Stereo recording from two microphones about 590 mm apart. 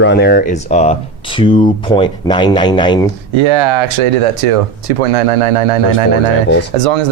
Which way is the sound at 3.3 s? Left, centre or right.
Right.